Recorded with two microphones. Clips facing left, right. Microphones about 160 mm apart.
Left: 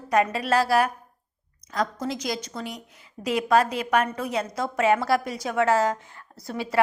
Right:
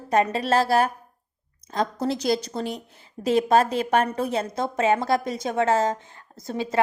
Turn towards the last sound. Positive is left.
turn(degrees=-20)  # may be behind; listen again after turning